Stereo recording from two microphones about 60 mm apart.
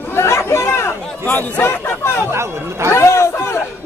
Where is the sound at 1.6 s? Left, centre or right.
Left.